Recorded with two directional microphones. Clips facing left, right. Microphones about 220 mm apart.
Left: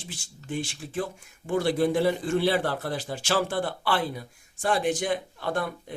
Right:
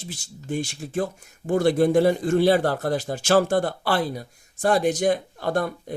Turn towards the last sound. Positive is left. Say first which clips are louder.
# right 5 dB
turn(degrees=-40)  # may be behind; listen again after turning